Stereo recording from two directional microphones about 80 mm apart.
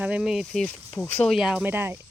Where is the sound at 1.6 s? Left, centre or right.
Right.